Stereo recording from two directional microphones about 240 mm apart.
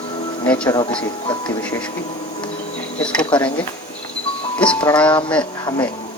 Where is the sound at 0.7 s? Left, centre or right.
Centre.